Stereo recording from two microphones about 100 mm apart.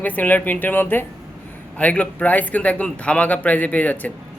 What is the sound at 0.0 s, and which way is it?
A man's voice, 15° left (ahead or behind).